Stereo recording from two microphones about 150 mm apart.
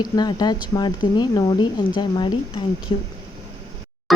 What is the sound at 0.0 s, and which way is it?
Speech, 30° left (ahead or behind).